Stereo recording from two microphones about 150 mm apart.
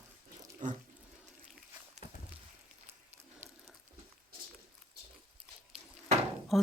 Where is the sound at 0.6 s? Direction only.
60° right (ahead or behind).